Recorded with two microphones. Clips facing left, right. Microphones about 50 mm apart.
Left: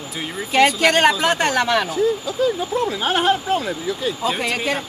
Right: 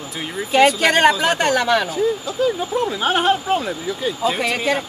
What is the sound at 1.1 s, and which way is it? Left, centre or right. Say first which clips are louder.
Speech: right 1 dB; centre.